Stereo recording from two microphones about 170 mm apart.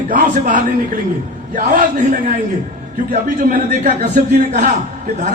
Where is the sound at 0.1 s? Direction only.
50° right (ahead or behind).